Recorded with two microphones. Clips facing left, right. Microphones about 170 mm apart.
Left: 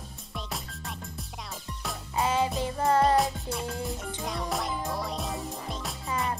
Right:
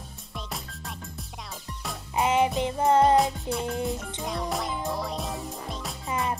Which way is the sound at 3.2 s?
Centre (ahead or behind).